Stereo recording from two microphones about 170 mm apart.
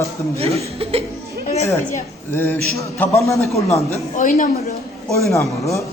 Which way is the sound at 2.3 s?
15° left (ahead or behind).